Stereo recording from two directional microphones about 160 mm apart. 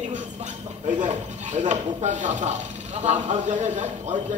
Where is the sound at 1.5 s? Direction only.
50° right (ahead or behind).